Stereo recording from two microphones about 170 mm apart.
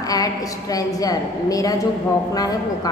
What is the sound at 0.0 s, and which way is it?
A woman's voice, 20° left (ahead or behind).